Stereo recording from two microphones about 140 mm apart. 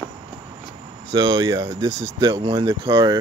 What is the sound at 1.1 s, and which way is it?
Speech, 35° right (ahead or behind).